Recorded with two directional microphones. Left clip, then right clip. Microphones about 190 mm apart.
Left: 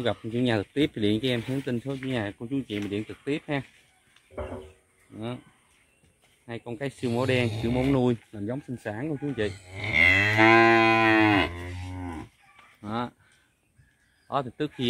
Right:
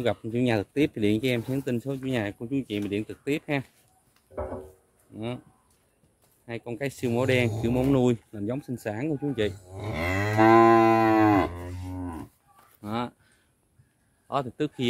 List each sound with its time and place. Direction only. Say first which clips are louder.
0.0 s speech: right 1 dB; centre (ahead or behind)
5.1 s speech: right 1 dB; centre (ahead or behind)
6.4 s speech: right 2 dB; 5° right (ahead or behind)
9.8 s moo: left 11 dB; 30° right (ahead or behind)
10.4 s cattle: right 2 dB; 30° right (ahead or behind)
11.5 s cattle: right 1 dB; 25° left (ahead or behind)
12.8 s speech: even; 5° right (ahead or behind)
14.2 s speech: even; 5° right (ahead or behind)